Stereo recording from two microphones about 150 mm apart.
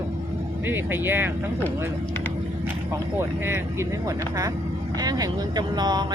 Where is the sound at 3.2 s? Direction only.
15° right (ahead or behind).